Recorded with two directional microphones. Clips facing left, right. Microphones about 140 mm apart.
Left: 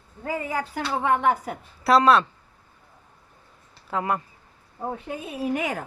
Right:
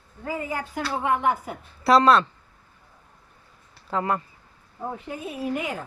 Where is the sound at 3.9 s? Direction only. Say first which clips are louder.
Right 1 dB; 5° left (ahead or behind).